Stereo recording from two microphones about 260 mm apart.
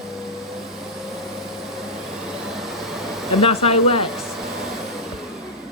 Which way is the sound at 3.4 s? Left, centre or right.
Left.